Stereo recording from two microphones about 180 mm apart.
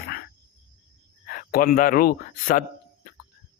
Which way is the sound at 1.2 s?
55° left (ahead or behind).